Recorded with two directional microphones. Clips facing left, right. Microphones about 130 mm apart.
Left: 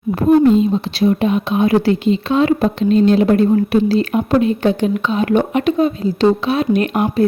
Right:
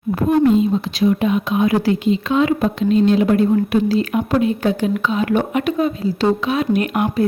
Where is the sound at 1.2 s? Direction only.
30° left (ahead or behind).